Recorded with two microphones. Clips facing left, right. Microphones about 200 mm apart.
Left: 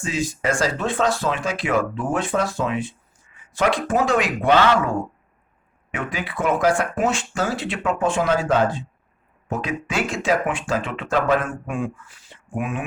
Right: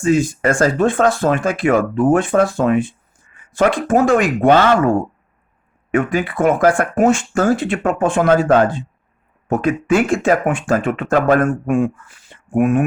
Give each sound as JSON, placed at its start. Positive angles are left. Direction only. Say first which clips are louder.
{"t": 0.0, "sound": "speech", "louder": "right 9 dB", "side_deg": -50}